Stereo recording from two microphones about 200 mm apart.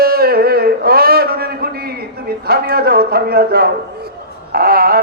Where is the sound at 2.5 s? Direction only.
50° right (ahead or behind).